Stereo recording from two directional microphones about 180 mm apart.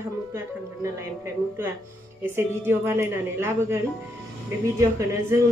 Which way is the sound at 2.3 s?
15° right (ahead or behind).